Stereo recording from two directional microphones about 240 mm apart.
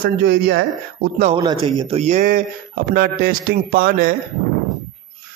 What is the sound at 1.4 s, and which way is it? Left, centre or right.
A man's voice, centre.